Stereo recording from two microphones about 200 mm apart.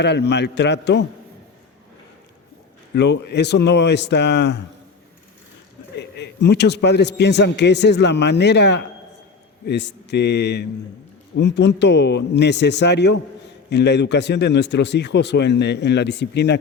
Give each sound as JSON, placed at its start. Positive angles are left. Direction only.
{"t": 0.0, "sound": "speech", "side_deg": 60}
{"t": 2.9, "sound": "speech", "side_deg": 60}
{"t": 6.0, "sound": "speech", "side_deg": 60}